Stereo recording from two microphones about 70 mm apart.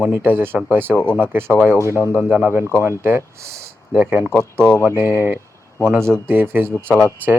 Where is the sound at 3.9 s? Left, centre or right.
Right.